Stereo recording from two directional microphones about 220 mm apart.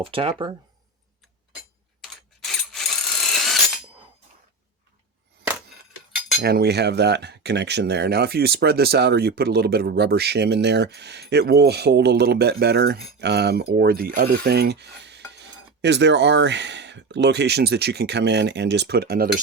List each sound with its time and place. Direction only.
0.0 s speech: 25° right (ahead or behind)
2.7 s a sound: centre (ahead or behind)
6.4 s speech: 45° right (ahead or behind)